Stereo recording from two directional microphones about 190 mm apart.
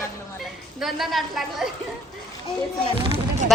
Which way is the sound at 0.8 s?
Centre (ahead or behind).